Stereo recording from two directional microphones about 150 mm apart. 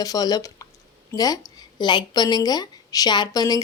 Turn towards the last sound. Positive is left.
turn(degrees=25)  # may be behind; listen again after turning